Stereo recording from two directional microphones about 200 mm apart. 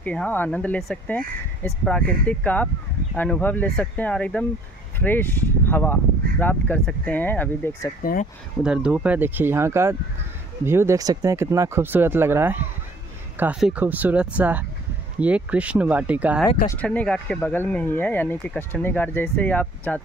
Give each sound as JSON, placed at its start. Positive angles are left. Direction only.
{"t": 0.0, "sound": "speech", "side_deg": 5}
{"t": 8.0, "sound": "speech", "side_deg": 45}
{"t": 8.6, "sound": "speech", "side_deg": -5}
{"t": 16.6, "sound": "speech", "side_deg": 10}